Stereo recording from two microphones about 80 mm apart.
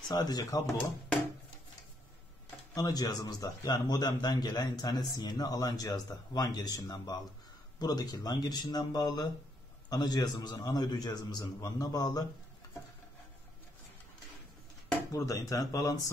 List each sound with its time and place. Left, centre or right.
0.1 s a man's voice: left
2.7 s a man's voice: left
15.0 s a man's voice: left